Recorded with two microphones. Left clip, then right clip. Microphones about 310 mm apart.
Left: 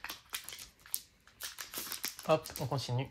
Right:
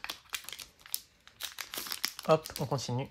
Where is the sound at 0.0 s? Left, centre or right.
Right.